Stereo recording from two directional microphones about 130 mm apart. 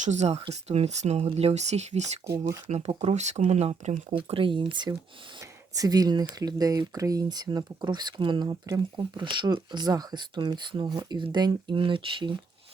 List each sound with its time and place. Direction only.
0.0 s speech: 60° right (ahead or behind); by 12.3 s 40° right (ahead or behind)